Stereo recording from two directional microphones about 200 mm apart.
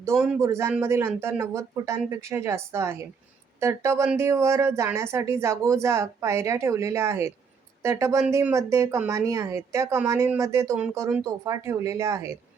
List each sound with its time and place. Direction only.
0.3 s speech: 15° right (ahead or behind)